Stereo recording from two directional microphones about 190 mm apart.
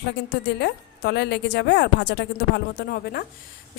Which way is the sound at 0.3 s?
60° left (ahead or behind).